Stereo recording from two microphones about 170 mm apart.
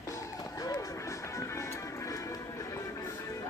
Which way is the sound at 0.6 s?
20° left (ahead or behind).